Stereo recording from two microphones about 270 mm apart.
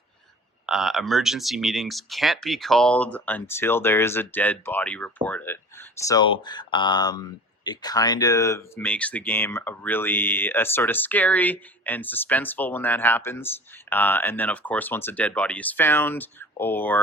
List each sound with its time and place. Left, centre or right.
0.7 s speech: centre